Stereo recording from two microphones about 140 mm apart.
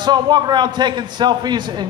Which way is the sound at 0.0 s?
30° right (ahead or behind).